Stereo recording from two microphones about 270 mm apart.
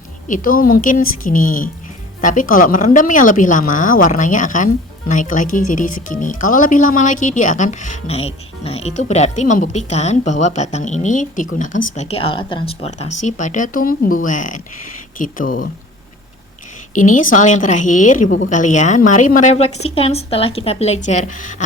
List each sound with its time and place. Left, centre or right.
0.3 s speech: left
16.9 s speech: left